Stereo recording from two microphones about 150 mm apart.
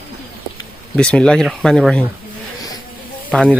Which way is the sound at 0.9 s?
5° left (ahead or behind).